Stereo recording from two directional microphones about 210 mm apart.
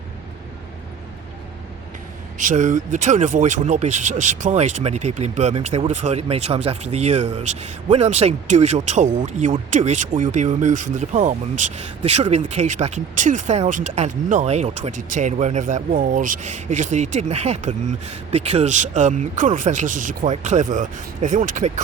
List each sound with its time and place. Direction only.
2.4 s speech: 35° right (ahead or behind)